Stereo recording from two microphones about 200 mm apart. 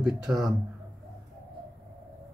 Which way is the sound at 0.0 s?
5° right (ahead or behind).